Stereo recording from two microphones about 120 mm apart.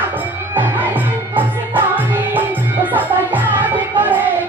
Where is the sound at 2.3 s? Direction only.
15° right (ahead or behind).